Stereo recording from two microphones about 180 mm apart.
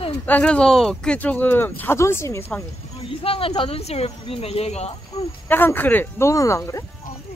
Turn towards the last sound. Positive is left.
turn(degrees=15)  # may be behind; listen again after turning